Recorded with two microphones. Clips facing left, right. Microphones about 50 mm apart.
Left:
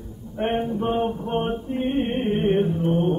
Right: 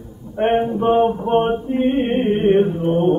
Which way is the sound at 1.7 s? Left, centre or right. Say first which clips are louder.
Right 6 dB; right.